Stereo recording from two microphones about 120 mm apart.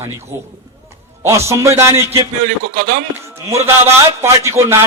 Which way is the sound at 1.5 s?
25° right (ahead or behind).